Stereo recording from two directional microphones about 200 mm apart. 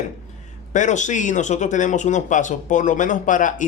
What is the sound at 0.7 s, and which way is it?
Speech, 35° left (ahead or behind).